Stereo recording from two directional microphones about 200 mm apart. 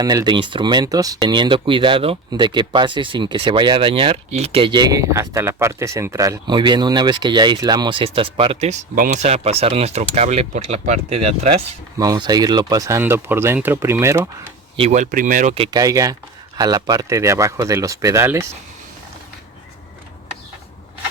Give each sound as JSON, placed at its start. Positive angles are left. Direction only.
{"t": 0.0, "sound": "speech", "side_deg": -20}
{"t": 11.9, "sound": "speech", "side_deg": -20}
{"t": 14.8, "sound": "speech", "side_deg": -35}